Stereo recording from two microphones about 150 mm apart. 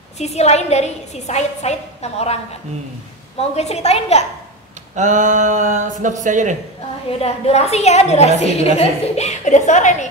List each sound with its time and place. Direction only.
0.2 s a woman's voice: 45° left (ahead or behind)
3.3 s a woman's voice: 45° left (ahead or behind)
4.9 s speech: 55° right (ahead or behind)
7.2 s a woman's voice: 45° left (ahead or behind)